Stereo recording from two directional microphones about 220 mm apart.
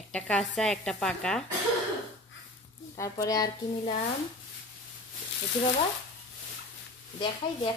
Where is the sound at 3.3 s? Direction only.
15° left (ahead or behind).